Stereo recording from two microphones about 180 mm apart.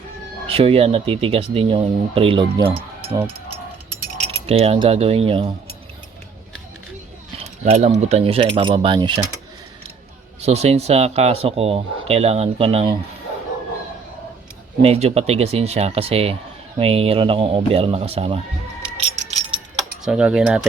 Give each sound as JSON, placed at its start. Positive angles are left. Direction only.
{"t": 0.4, "sound": "speech", "side_deg": -30}
{"t": 4.2, "sound": "speech", "side_deg": -30}
{"t": 7.3, "sound": "speech", "side_deg": -35}
{"t": 10.4, "sound": "speech", "side_deg": -35}
{"t": 14.8, "sound": "speech", "side_deg": -35}
{"t": 18.9, "sound": "rattle", "side_deg": -40}
{"t": 20.1, "sound": "speech", "side_deg": -5}